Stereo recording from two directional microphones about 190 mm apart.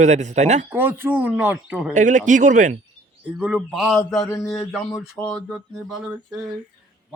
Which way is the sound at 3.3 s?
5° right (ahead or behind).